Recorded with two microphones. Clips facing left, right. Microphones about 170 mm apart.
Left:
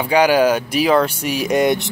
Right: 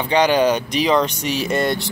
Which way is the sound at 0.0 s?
10° left (ahead or behind).